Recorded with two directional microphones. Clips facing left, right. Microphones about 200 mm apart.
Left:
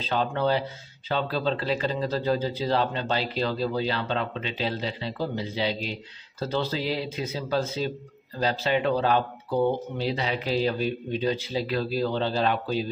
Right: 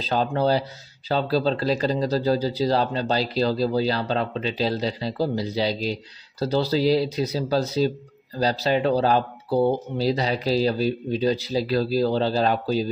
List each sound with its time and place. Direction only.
0.0 s speech: 35° right (ahead or behind)